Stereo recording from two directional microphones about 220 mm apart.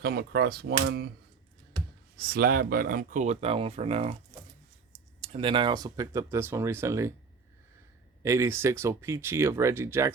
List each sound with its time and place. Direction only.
0.0 s speech: 45° right (ahead or behind)
2.1 s speech: 45° right (ahead or behind); by 4.2 s 30° right (ahead or behind)
5.2 s speech: 25° right (ahead or behind)
8.2 s speech: 15° right (ahead or behind)